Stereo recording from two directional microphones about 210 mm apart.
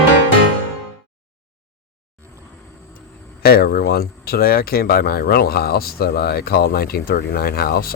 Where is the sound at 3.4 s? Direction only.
45° left (ahead or behind).